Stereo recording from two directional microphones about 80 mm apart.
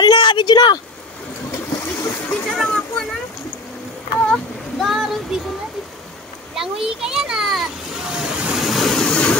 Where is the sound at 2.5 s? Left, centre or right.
Centre.